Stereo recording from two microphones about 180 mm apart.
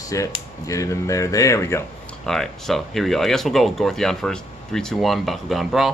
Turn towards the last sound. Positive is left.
turn(degrees=0)  # may be behind; listen again after turning